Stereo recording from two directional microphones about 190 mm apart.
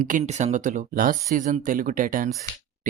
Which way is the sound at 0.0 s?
40° right (ahead or behind).